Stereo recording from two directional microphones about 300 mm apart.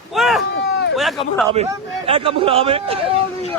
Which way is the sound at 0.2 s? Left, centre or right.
Centre.